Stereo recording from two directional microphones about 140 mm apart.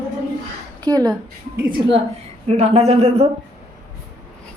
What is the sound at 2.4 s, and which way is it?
Speech, 50° right (ahead or behind).